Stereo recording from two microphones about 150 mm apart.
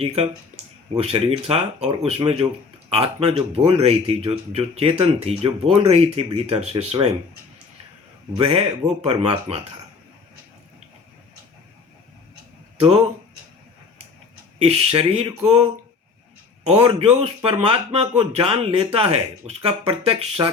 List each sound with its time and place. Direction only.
0.9 s speech: 40° right (ahead or behind)
8.4 s speech: 40° right (ahead or behind)
12.8 s speech: 40° right (ahead or behind)
14.6 s speech: 45° right (ahead or behind)
16.6 s speech: 40° right (ahead or behind)